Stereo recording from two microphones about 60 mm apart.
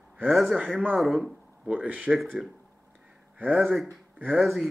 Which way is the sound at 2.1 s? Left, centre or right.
Centre.